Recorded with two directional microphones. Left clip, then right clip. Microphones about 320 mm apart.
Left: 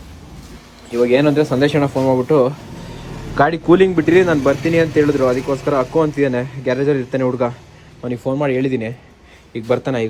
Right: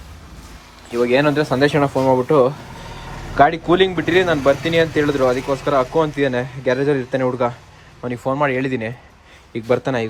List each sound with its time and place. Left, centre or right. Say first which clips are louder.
0.9 s speech: left 2 dB; centre
8.6 s a man's voice: left 3 dB; right
9.5 s speech: even; centre